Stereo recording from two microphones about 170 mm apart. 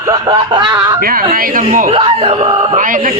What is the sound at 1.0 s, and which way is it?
Speech, 60° right (ahead or behind).